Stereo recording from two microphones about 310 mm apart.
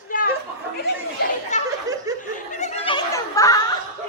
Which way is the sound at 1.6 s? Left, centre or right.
Centre.